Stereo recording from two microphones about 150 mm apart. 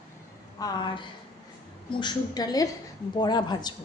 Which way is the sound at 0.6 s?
25° left (ahead or behind).